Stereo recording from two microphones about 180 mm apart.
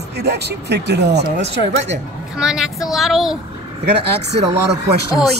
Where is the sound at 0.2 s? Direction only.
70° right (ahead or behind).